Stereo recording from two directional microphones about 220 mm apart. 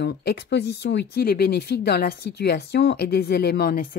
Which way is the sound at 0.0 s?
45° left (ahead or behind).